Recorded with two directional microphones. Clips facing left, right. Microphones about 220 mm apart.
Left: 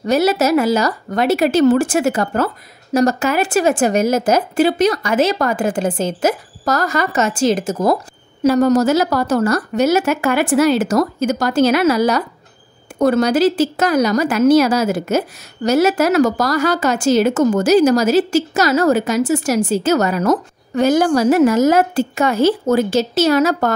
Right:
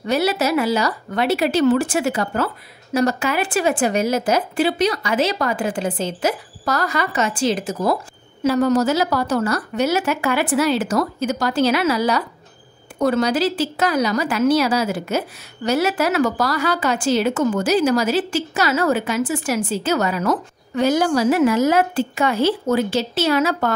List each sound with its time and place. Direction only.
0.0 s a woman's voice: 45° left (ahead or behind)